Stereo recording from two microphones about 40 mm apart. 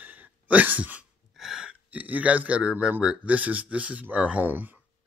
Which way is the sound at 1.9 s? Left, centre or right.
Right.